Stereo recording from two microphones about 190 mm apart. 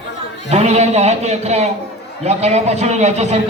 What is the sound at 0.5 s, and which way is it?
A man's voice, 35° right (ahead or behind).